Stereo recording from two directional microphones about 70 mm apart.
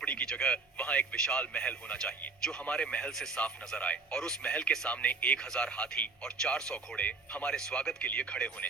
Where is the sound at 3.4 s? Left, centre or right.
Centre.